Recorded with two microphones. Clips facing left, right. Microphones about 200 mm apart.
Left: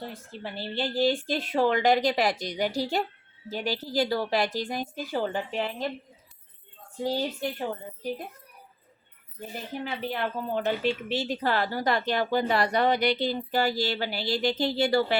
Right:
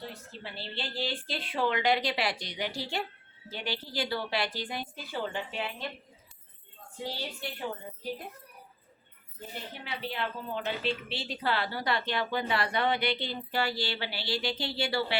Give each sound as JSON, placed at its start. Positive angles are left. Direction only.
{"t": 0.1, "sound": "a woman's voice", "side_deg": 50}
{"t": 7.0, "sound": "speech", "side_deg": 45}
{"t": 9.8, "sound": "speech", "side_deg": 45}